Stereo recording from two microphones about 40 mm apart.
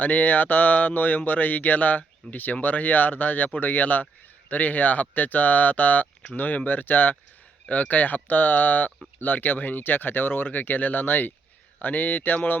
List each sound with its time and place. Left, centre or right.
0.0 s speech: left